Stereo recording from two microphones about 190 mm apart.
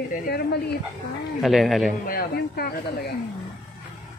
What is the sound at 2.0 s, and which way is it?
Speech, 55° left (ahead or behind).